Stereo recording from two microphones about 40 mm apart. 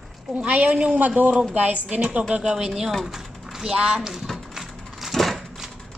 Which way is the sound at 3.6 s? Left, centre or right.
Right.